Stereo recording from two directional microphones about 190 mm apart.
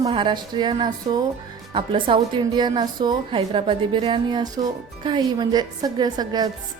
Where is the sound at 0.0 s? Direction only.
25° right (ahead or behind).